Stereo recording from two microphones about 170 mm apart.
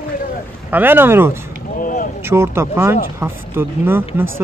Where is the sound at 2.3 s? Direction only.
15° right (ahead or behind).